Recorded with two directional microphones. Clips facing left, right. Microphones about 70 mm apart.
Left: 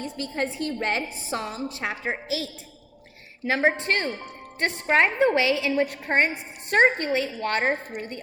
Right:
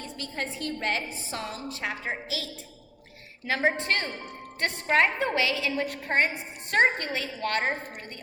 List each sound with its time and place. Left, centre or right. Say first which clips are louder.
0.2 s a woman's voice: left 5 dB; left
3.4 s a woman's voice: left 3 dB; left